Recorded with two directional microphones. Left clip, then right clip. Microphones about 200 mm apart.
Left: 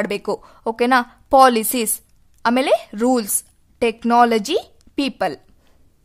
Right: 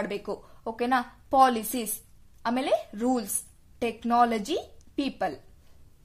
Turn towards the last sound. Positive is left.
turn(degrees=40)  # may be behind; listen again after turning